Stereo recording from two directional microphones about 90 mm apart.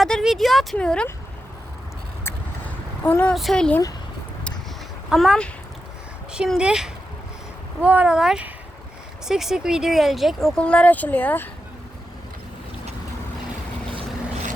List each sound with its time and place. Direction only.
0.0 s speech: centre (ahead or behind)
2.2 s vehicle: 20° left (ahead or behind)
3.3 s speech: 5° left (ahead or behind)
5.0 s speech: 5° right (ahead or behind)
10.6 s speech: 15° left (ahead or behind)